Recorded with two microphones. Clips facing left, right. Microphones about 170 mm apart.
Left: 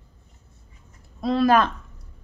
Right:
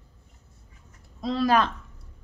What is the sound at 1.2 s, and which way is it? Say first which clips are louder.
Speech: left 4 dB; 60° left (ahead or behind).